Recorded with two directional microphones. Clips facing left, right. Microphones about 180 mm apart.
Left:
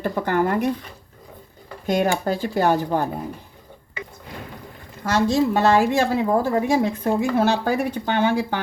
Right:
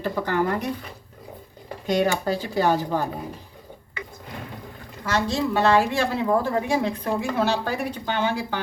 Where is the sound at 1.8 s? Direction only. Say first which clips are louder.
Left 1 dB; 50° left (ahead or behind).